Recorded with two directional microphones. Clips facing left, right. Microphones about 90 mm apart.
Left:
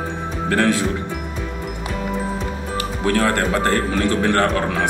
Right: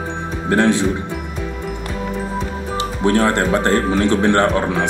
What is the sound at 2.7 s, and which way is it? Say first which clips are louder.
Speech: right 4 dB; 25° right (ahead or behind).